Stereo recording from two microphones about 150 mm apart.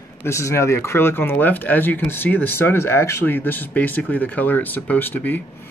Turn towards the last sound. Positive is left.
turn(degrees=10)  # may be behind; listen again after turning